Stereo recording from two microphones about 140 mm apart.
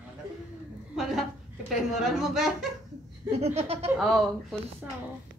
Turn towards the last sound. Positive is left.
turn(degrees=0)  # may be behind; listen again after turning